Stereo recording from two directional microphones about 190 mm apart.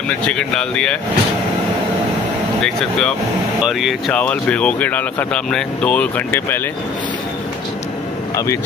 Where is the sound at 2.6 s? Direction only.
Centre (ahead or behind).